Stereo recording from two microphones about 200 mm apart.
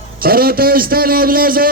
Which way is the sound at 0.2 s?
50° right (ahead or behind).